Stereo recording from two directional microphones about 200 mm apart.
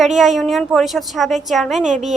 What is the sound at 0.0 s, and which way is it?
A woman's voice, centre (ahead or behind).